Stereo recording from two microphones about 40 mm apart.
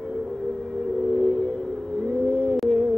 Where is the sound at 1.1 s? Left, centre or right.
Left.